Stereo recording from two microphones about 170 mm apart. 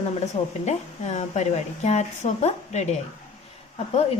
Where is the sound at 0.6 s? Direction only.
40° left (ahead or behind).